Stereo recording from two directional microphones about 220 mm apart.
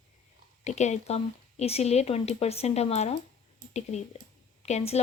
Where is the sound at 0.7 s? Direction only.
30° left (ahead or behind).